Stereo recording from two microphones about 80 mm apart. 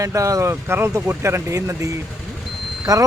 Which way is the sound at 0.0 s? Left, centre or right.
Right.